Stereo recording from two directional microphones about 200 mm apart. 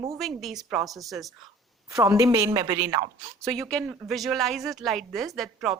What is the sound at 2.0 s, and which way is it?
A woman's voice, 15° right (ahead or behind).